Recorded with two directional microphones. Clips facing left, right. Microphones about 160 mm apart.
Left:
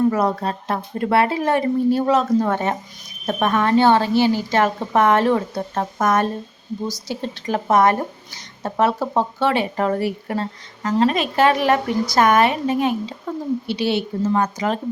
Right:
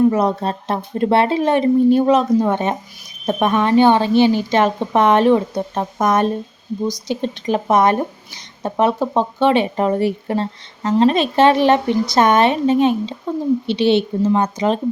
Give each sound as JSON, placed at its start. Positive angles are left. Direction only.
{"t": 0.1, "sound": "speech", "side_deg": -20}